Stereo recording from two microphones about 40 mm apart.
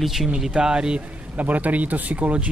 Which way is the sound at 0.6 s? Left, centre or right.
Right.